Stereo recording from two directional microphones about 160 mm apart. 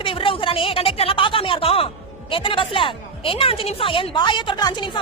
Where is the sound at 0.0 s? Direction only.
30° left (ahead or behind).